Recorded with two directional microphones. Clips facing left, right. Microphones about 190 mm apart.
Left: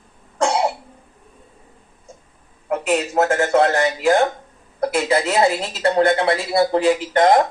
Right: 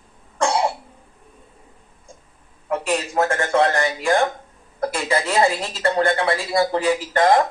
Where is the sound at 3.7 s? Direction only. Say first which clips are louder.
Left 3 dB; 20° left (ahead or behind).